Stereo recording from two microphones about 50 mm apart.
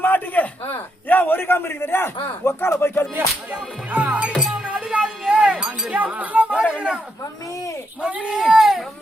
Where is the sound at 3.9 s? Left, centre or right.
Right.